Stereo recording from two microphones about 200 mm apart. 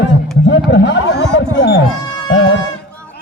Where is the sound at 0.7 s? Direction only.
65° left (ahead or behind).